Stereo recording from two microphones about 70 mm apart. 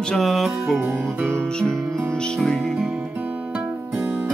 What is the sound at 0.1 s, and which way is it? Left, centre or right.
Music, centre.